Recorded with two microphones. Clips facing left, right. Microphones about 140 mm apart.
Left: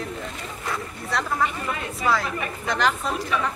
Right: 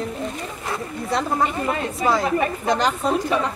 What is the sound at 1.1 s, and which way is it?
A woman's voice, 30° right (ahead or behind).